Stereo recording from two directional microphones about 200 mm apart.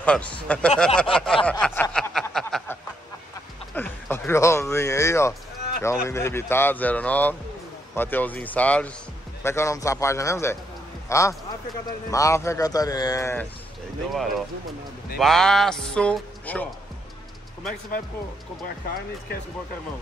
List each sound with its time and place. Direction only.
0.0 s speech: 5° left (ahead or behind)
3.7 s a sound: 10° left (ahead or behind)
5.8 s speech: 15° left (ahead or behind)
14.1 s a man's voice: centre (ahead or behind)